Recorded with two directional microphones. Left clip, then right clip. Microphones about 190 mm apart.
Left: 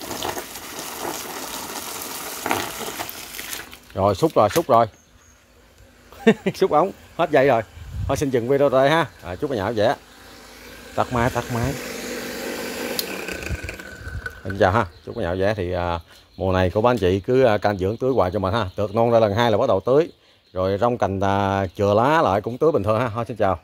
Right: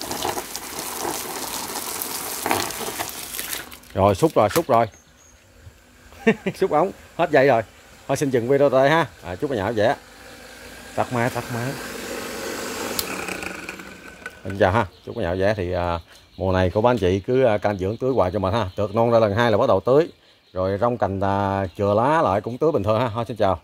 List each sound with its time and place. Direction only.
0.0 s water: centre (ahead or behind)
3.9 s speech: 20° right (ahead or behind)
4.2 s speech: centre (ahead or behind)
6.2 s speech: 30° left (ahead or behind)
6.7 s speech: 5° left (ahead or behind)
11.0 s speech: 15° left (ahead or behind)
12.9 s a sound: centre (ahead or behind)
14.6 s speech: 5° left (ahead or behind)
20.5 s speech: 10° left (ahead or behind)